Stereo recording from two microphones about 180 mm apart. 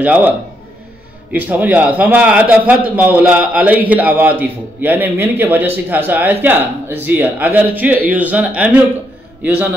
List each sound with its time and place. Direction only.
0.0 s speech: 5° right (ahead or behind)
1.3 s speech: 10° right (ahead or behind)